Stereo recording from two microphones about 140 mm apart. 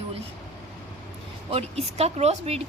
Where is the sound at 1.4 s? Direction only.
45° right (ahead or behind).